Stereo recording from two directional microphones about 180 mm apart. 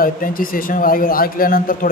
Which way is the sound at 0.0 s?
50° left (ahead or behind).